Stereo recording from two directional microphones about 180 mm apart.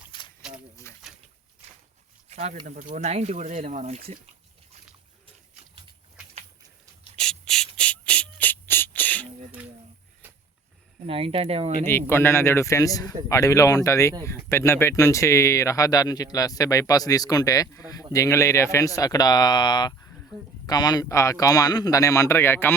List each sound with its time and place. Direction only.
0.1 s a sound: 25° left (ahead or behind)
0.9 s pigeon: 15° left (ahead or behind)
2.3 s speech: 35° right (ahead or behind)
7.2 s rub: 5° left (ahead or behind)
7.8 s beatboxing: 5° left (ahead or behind)
11.0 s speech: 30° right (ahead or behind)
11.9 s speech: 15° left (ahead or behind)